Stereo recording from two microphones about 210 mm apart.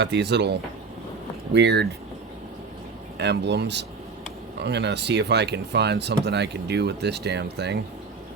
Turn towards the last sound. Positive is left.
turn(degrees=-55)  # may be behind; listen again after turning